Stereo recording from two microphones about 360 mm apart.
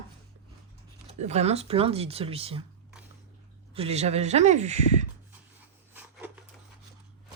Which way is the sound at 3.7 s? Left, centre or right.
Centre.